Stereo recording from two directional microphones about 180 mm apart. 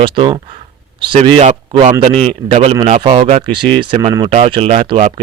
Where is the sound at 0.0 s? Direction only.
30° right (ahead or behind).